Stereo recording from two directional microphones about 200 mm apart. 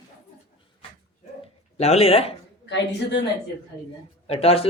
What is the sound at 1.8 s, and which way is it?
Speech, 30° left (ahead or behind).